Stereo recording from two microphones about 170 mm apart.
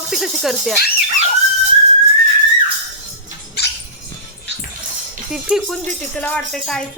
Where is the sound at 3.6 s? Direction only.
75° left (ahead or behind).